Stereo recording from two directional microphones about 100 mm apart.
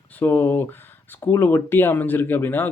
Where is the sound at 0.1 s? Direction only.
20° left (ahead or behind).